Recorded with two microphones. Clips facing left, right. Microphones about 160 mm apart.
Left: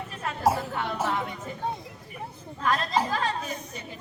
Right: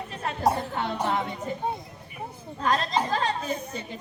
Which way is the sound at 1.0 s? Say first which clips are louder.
Right 3 dB; 30° right (ahead or behind).